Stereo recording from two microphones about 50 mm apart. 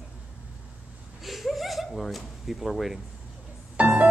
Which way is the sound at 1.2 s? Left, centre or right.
Centre.